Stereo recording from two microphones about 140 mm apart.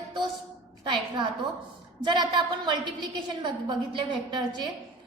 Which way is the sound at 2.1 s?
30° right (ahead or behind).